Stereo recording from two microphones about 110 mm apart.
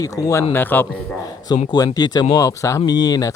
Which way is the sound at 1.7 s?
35° left (ahead or behind).